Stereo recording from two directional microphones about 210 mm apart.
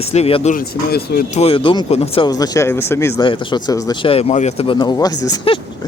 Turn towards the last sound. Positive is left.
turn(degrees=20)  # may be behind; listen again after turning